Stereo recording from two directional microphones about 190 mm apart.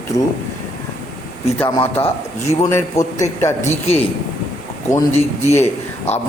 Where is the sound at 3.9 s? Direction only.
30° left (ahead or behind).